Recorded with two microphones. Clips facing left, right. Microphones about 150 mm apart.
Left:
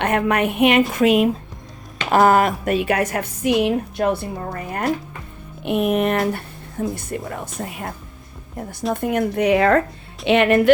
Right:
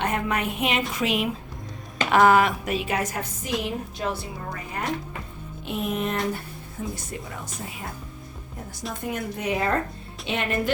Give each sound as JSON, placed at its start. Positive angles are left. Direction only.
{"t": 0.0, "sound": "speech", "side_deg": 65}
{"t": 5.6, "sound": "speech", "side_deg": 65}
{"t": 8.9, "sound": "speech", "side_deg": 60}